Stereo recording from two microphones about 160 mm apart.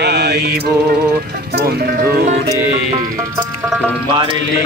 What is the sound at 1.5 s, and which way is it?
Mantra, 75° right (ahead or behind).